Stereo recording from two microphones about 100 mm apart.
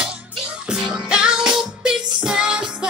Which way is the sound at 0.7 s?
5° right (ahead or behind).